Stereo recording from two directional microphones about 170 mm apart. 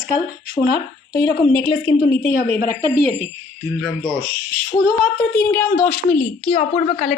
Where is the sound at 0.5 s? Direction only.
65° left (ahead or behind).